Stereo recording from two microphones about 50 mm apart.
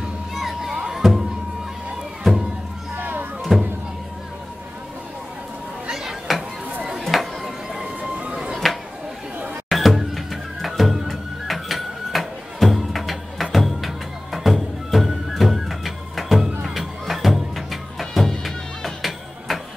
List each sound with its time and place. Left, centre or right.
0.3 s music: centre
2.2 s music: centre
3.0 s music: right
3.5 s music: centre
5.9 s a sound: centre
8.1 s music: centre
8.6 s a sound: centre
9.7 s music: centre